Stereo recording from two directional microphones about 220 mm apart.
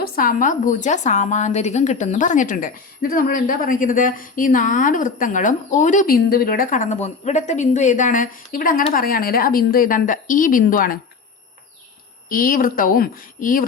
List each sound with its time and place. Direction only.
0.0 s a woman's voice: 40° left (ahead or behind)
12.3 s a woman's voice: 40° left (ahead or behind)